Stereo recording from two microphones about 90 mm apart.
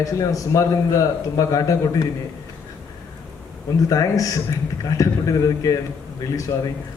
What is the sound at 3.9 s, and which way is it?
A man's voice, 40° left (ahead or behind).